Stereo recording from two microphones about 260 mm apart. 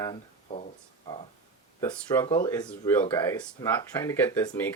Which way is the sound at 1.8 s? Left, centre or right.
Centre.